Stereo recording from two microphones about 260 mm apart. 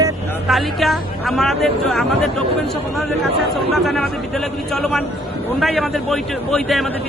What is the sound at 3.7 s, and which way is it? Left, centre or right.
Speech, centre.